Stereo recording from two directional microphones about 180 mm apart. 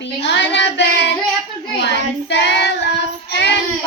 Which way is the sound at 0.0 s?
75° left (ahead or behind).